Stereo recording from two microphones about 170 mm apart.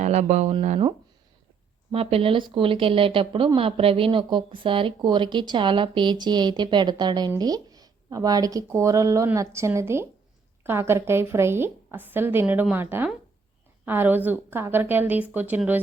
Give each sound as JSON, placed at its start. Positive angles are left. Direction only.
{"t": 0.0, "sound": "speech", "side_deg": -45}
{"t": 1.9, "sound": "a woman's voice", "side_deg": -35}